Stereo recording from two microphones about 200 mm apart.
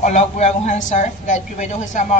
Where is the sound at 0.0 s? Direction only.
35° left (ahead or behind).